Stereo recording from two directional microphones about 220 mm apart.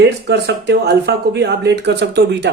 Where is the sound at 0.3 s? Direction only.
50° right (ahead or behind).